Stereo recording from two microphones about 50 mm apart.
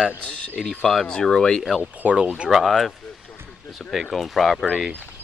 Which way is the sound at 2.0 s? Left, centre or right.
Right.